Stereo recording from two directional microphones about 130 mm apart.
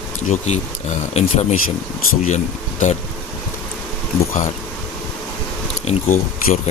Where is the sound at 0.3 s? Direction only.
60° left (ahead or behind).